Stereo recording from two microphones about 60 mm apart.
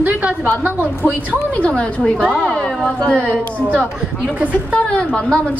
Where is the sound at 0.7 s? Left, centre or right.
Right.